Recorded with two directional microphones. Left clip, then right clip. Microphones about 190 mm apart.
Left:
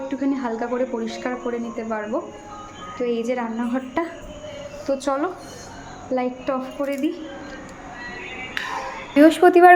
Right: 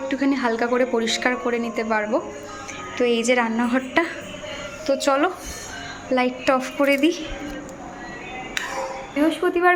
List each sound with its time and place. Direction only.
0.1 s speech: centre (ahead or behind)
6.1 s speech: centre (ahead or behind)
9.1 s a woman's voice: 35° left (ahead or behind)